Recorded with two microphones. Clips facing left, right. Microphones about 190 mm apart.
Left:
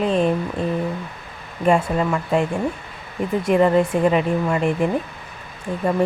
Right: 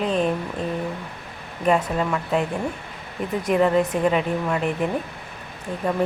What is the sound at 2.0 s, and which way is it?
Speech, 5° left (ahead or behind).